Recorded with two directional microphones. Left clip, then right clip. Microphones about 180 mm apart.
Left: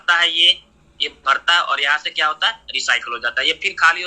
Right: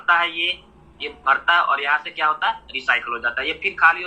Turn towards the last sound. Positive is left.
turn(degrees=30)  # may be behind; listen again after turning